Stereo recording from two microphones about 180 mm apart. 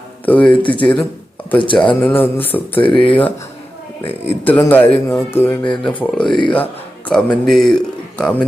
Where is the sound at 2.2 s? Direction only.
10° left (ahead or behind).